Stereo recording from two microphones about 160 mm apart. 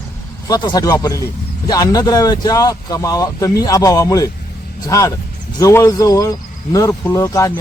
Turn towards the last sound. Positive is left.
turn(degrees=20)  # may be behind; listen again after turning